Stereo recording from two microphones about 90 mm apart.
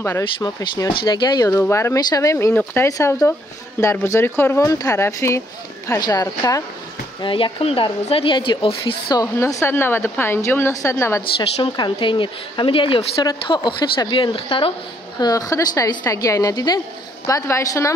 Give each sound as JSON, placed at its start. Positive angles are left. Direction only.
{"t": 0.4, "sound": "speech", "side_deg": 45}
{"t": 1.5, "sound": "a woman's voice", "side_deg": 30}
{"t": 2.0, "sound": "a woman's voice", "side_deg": 45}
{"t": 2.9, "sound": "a woman's voice", "side_deg": 35}
{"t": 4.6, "sound": "a woman's voice", "side_deg": 40}
{"t": 5.9, "sound": "speech", "side_deg": 50}
{"t": 6.2, "sound": "a woman's voice", "side_deg": 35}
{"t": 7.2, "sound": "speech", "side_deg": 65}
{"t": 9.1, "sound": "a woman's voice", "side_deg": 35}
{"t": 11.6, "sound": "speech", "side_deg": 60}
{"t": 13.2, "sound": "speech", "side_deg": 50}
{"t": 13.7, "sound": "speech", "side_deg": 65}
{"t": 15.1, "sound": "a woman's voice", "side_deg": 45}
{"t": 17.3, "sound": "a woman's voice", "side_deg": 30}